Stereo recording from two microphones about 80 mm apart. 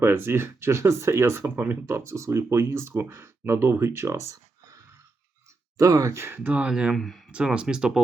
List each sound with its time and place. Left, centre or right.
0.0 s speech: right
2.0 s speech: right
6.5 s speech: centre
6.9 s speech: centre
7.3 s speech: centre